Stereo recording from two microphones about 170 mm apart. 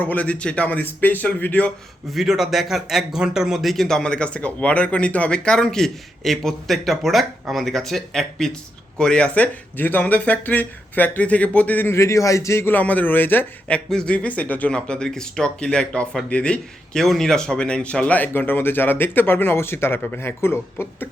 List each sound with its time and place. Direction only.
0.0 s speech: 10° left (ahead or behind)
2.1 s speech: centre (ahead or behind); by 21.1 s 15° left (ahead or behind)